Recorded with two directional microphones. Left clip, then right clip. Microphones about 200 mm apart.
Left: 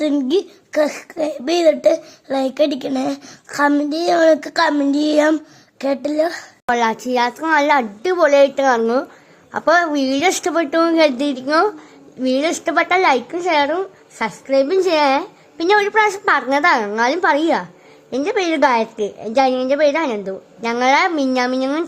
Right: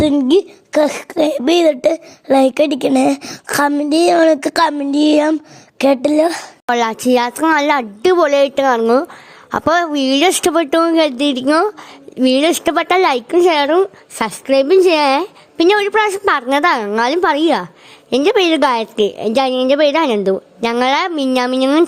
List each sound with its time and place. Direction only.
0.3 s a child's voice: 35° right (ahead or behind)